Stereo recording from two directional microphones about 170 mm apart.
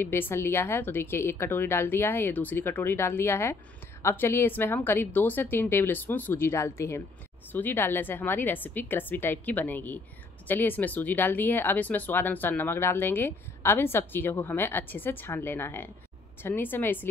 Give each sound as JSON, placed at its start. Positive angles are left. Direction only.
{"t": 0.0, "sound": "speech", "side_deg": 15}